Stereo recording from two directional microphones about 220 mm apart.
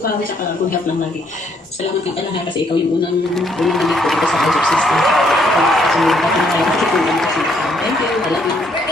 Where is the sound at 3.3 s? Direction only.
Centre (ahead or behind).